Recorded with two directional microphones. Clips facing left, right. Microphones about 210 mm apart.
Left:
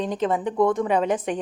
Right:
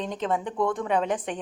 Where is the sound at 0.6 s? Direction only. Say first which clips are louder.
Left 8 dB; 20° left (ahead or behind).